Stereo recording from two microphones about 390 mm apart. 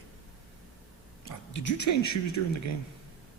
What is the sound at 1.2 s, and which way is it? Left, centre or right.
Speech, left.